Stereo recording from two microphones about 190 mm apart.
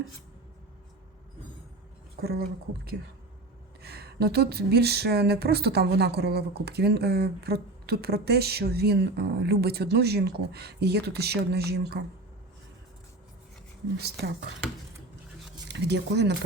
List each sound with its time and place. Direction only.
2.2 s speech: 55° right (ahead or behind)
3.8 s speech: 55° right (ahead or behind)
15.7 s speech: 65° right (ahead or behind)